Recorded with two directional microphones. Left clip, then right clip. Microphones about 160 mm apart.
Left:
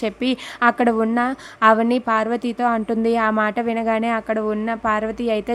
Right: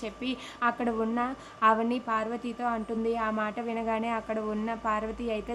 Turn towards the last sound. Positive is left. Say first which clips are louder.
# left 10 dB
turn(degrees=45)  # may be behind; listen again after turning